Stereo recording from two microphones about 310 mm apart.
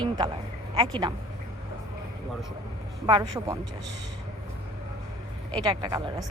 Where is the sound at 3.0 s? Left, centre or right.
Centre.